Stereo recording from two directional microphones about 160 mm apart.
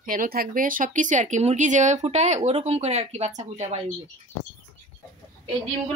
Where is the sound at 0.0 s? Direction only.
60° right (ahead or behind).